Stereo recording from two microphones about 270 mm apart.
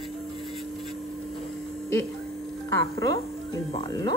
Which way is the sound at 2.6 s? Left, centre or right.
Centre.